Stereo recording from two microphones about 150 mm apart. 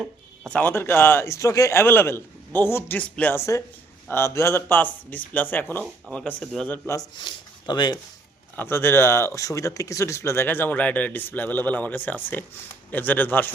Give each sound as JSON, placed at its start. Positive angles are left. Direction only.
{"t": 0.4, "sound": "speech", "side_deg": 10}
{"t": 8.5, "sound": "speech", "side_deg": 15}